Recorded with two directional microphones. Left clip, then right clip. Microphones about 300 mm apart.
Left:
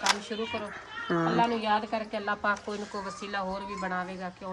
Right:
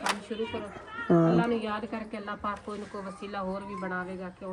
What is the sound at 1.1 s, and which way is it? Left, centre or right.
Speech, centre.